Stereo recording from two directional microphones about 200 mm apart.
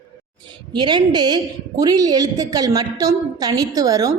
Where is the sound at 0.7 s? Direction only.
20° right (ahead or behind).